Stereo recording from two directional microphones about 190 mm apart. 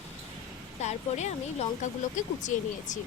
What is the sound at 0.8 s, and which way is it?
Speech, 35° left (ahead or behind).